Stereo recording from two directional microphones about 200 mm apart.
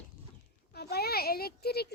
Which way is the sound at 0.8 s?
50° left (ahead or behind).